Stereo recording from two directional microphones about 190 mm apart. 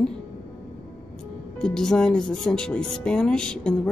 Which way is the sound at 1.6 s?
5° left (ahead or behind).